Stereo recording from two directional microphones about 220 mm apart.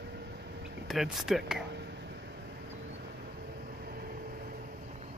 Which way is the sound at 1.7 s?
50° right (ahead or behind).